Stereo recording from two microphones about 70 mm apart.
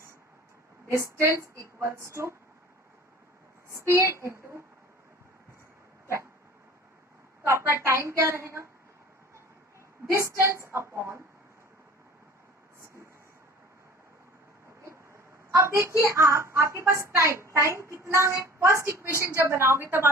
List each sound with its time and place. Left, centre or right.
0.9 s a woman's voice: right
3.7 s a woman's voice: right
7.6 s a woman's voice: right
10.1 s a woman's voice: right
15.5 s a woman's voice: right